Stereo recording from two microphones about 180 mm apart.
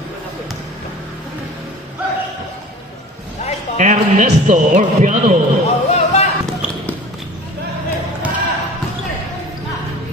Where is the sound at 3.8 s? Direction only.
40° right (ahead or behind).